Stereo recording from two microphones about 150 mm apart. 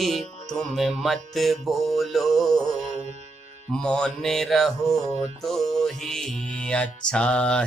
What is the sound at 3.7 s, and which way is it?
Music, 5° left (ahead or behind).